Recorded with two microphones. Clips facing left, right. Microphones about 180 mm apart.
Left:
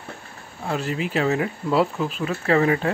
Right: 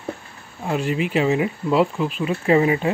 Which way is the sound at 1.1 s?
10° right (ahead or behind).